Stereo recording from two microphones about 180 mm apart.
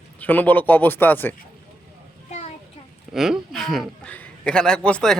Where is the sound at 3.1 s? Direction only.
Centre (ahead or behind).